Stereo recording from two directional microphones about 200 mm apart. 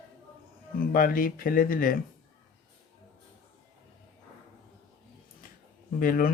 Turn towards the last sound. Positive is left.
turn(degrees=45)  # may be behind; listen again after turning